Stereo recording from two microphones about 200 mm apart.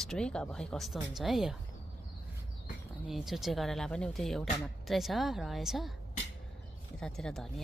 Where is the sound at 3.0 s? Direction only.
Centre (ahead or behind).